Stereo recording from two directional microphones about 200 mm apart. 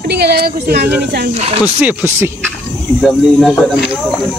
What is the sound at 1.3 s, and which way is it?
Speech, 30° right (ahead or behind).